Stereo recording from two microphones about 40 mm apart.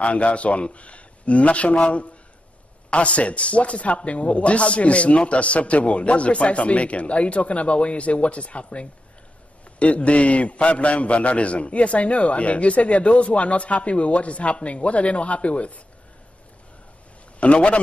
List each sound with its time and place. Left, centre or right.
0.0 s a man's voice: left
17.4 s a man's voice: left